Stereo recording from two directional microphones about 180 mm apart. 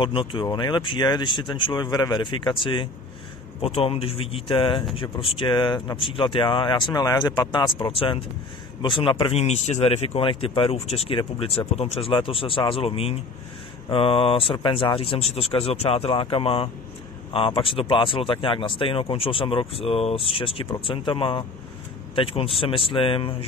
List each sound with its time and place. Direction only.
0.0 s speech: 30° left (ahead or behind)